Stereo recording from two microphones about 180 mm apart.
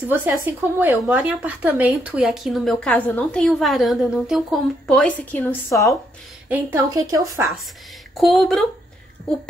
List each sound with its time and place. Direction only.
0.1 s speech: 10° right (ahead or behind); by 5.9 s 20° left (ahead or behind)
6.5 s speech: 15° right (ahead or behind)
8.1 s speech: centre (ahead or behind)